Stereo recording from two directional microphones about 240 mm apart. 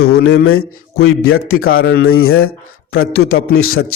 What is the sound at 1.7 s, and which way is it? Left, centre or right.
Speech, left.